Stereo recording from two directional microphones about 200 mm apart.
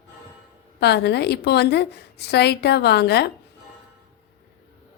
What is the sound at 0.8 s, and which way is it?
A woman's voice, 55° left (ahead or behind).